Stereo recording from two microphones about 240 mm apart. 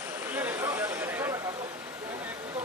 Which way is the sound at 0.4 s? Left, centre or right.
Centre.